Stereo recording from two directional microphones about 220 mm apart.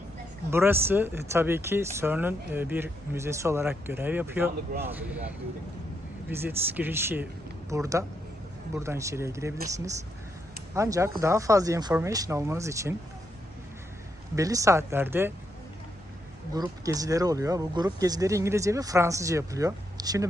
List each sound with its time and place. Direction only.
0.5 s speech: 10° right (ahead or behind)
6.3 s speech: 10° right (ahead or behind)
14.3 s speech: 15° right (ahead or behind)
16.6 s speech: 15° right (ahead or behind)